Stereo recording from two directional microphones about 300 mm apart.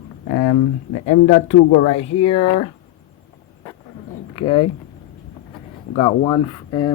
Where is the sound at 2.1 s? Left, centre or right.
Left.